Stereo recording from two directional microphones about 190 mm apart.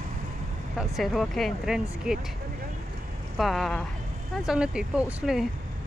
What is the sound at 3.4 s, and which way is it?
Speech, centre (ahead or behind).